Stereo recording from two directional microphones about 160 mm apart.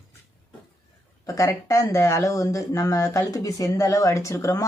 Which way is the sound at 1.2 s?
20° left (ahead or behind).